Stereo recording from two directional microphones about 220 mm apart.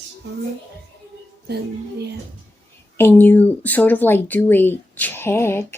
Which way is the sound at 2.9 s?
10° left (ahead or behind).